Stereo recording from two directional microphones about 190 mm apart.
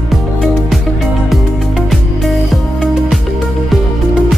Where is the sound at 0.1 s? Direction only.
Centre (ahead or behind).